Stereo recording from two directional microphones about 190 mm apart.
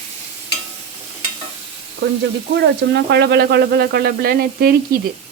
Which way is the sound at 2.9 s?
60° right (ahead or behind).